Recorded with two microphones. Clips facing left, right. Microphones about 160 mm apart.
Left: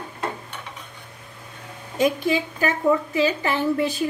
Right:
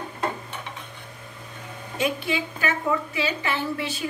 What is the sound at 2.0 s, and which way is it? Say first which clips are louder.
A woman's voice: left 5 dB; 40° left (ahead or behind).